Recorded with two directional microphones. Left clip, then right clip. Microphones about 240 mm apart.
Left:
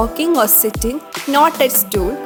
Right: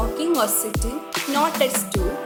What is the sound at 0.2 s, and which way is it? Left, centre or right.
Speech, left.